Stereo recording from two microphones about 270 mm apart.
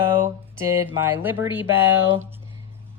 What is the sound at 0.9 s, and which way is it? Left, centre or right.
Speech, centre.